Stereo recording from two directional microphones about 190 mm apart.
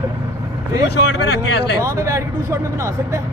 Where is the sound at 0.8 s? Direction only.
60° left (ahead or behind).